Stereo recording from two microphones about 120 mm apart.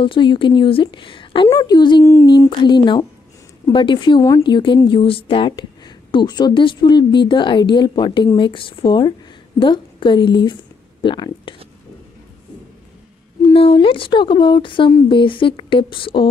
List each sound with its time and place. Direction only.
0.0 s a woman's voice: 45° left (ahead or behind)
4.2 s a woman's voice: 30° left (ahead or behind)
4.8 s a woman's voice: 45° left (ahead or behind)
11.5 s a sound: 45° left (ahead or behind)
13.5 s a woman's voice: 50° left (ahead or behind)